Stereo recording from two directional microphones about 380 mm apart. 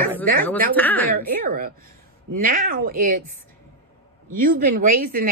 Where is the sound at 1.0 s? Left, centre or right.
Right.